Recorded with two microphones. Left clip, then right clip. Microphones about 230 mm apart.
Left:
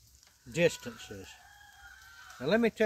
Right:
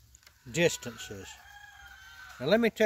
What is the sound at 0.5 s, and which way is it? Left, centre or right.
Speech, right.